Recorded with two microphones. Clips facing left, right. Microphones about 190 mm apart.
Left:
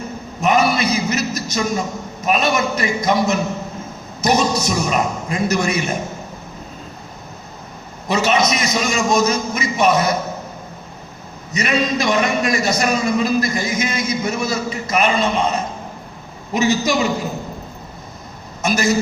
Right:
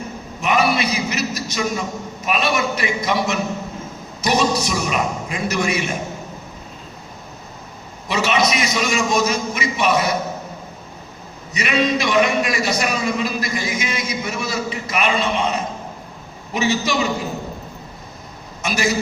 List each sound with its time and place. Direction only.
0.4 s a man's voice: 45° left (ahead or behind)
8.0 s a sound: 45° left (ahead or behind)
8.4 s a man's voice: 40° left (ahead or behind)
11.5 s a man's voice: 40° left (ahead or behind)
18.6 s a man's voice: 40° left (ahead or behind)